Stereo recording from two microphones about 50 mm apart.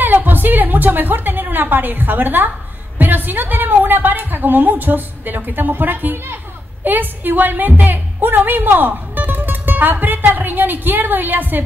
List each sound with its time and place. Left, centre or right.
0.0 s a woman's voice: right